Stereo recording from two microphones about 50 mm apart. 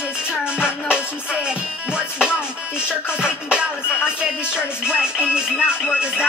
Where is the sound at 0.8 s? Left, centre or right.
Centre.